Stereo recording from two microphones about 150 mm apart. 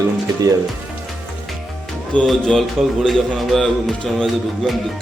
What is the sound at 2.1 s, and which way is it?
Speech, 5° left (ahead or behind).